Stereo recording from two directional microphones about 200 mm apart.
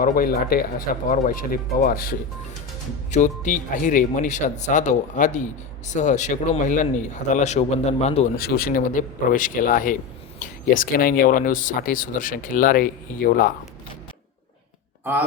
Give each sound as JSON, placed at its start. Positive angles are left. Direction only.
{"t": 0.0, "sound": "speech", "side_deg": 45}
{"t": 3.1, "sound": "speech", "side_deg": 35}
{"t": 8.4, "sound": "speech", "side_deg": 50}